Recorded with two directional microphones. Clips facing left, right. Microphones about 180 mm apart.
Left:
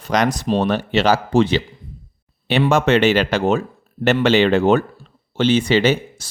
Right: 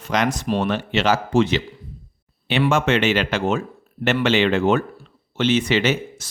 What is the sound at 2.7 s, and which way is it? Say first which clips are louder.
Speech: left 6 dB; 35° left (ahead or behind).